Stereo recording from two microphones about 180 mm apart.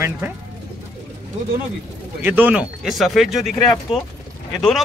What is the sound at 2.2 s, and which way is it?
Speech, 10° right (ahead or behind).